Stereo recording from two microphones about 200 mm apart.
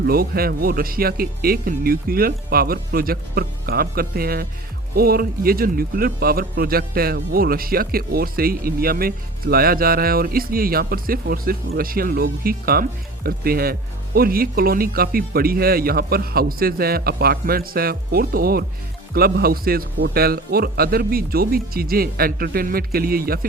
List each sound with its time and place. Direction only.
0.0 s speech: 50° right (ahead or behind)